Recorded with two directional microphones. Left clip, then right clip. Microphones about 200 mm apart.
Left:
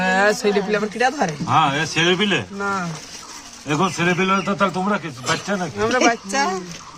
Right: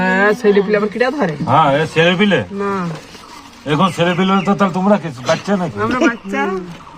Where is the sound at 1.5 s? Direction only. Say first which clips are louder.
Right 6 dB; 30° right (ahead or behind).